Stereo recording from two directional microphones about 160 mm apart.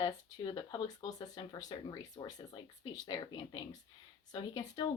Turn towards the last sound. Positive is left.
turn(degrees=25)  # may be behind; listen again after turning